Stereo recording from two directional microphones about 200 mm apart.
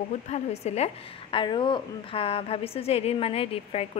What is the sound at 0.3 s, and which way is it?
A woman's voice, 35° left (ahead or behind).